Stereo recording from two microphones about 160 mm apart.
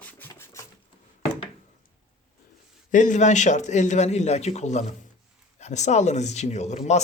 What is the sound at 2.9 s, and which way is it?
Speech, 50° left (ahead or behind).